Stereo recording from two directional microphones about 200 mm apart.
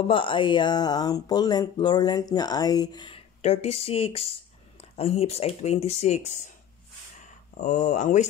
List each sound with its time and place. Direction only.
0.1 s speech: 25° left (ahead or behind)
7.5 s speech: 40° left (ahead or behind)